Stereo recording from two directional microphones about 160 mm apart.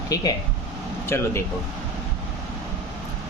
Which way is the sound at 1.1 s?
15° left (ahead or behind).